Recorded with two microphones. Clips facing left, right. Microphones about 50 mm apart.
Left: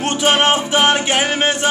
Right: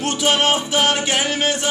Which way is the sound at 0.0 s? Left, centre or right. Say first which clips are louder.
Left 3 dB; left.